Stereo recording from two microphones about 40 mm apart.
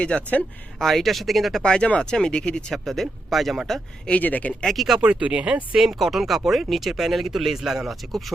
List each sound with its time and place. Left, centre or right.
0.0 s speech: left
0.8 s speech: centre
1.6 s speech: left
2.7 s speech: centre
4.1 s speech: left
4.6 s speech: centre
4.9 s speech: right
5.7 s speech: centre